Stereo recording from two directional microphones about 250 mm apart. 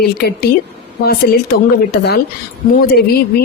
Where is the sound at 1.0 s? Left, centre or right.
Left.